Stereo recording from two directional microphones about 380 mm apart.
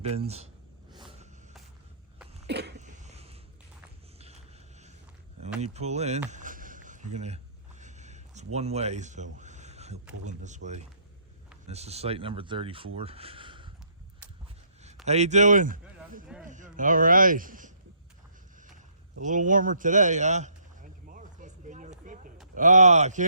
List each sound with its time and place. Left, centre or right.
0.0 s speech: centre
2.4 s cough: right
4.2 s a sound: centre
8.5 s speech: centre
15.0 s a man's voice: centre
19.2 s a sound: centre
22.5 s speech: centre